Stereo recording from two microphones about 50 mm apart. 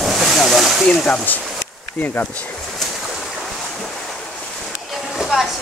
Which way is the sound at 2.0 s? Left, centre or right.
Left.